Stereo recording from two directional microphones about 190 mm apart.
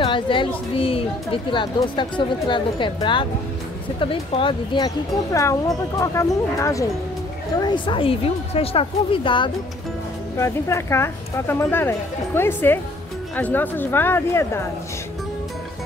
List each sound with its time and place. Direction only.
0.0 s speech: 25° left (ahead or behind)
10.3 s speech: 15° left (ahead or behind)